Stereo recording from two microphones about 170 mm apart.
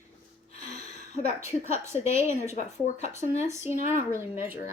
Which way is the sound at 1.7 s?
40° left (ahead or behind).